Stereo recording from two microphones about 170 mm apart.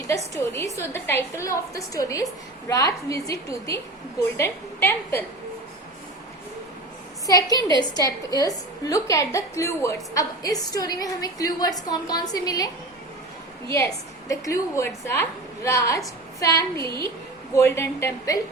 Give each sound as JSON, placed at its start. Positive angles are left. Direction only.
{"t": 0.3, "sound": "a woman's voice", "side_deg": 15}
{"t": 7.3, "sound": "a woman's voice", "side_deg": 20}
{"t": 14.3, "sound": "a woman's voice", "side_deg": 20}